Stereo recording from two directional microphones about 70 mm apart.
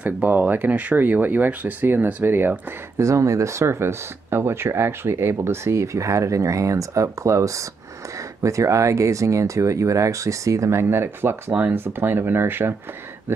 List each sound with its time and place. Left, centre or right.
0.0 s speech: right
3.0 s speech: right